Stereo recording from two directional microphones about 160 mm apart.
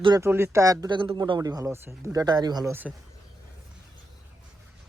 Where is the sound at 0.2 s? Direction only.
15° right (ahead or behind).